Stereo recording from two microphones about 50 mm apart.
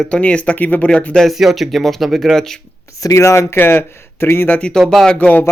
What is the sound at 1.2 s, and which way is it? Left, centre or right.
Speech, centre.